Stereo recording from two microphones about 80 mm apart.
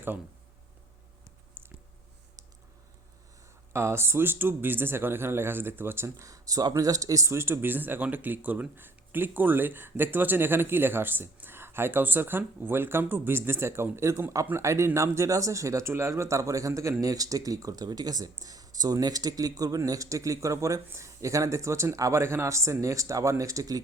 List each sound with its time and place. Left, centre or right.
1.6 s a sound: right
3.7 s speech: right
6.2 s speech: right